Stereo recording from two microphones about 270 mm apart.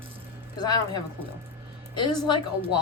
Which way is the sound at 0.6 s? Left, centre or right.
Centre.